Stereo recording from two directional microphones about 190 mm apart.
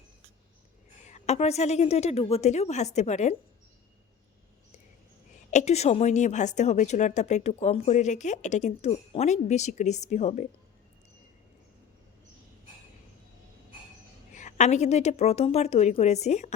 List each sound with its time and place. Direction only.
1.0 s a woman's voice: 35° left (ahead or behind)
5.5 s a woman's voice: 35° left (ahead or behind)
14.3 s a woman's voice: 40° left (ahead or behind)